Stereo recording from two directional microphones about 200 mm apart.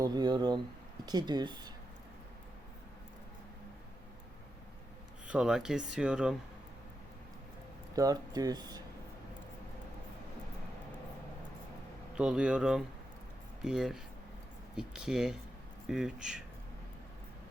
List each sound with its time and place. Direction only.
0.0 s speech: 20° right (ahead or behind)
5.3 s speech: 5° right (ahead or behind)
7.9 s speech: 20° right (ahead or behind)
12.1 s speech: 5° right (ahead or behind)